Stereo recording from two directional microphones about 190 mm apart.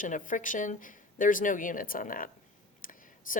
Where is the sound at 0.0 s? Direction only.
45° left (ahead or behind).